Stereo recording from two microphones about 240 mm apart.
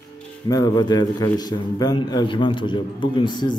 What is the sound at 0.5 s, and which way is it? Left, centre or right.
A man's voice, centre.